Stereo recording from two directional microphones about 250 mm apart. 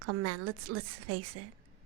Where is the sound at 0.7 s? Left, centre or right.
Right.